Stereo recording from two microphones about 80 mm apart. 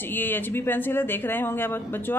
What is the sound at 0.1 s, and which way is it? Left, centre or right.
A woman's voice, left.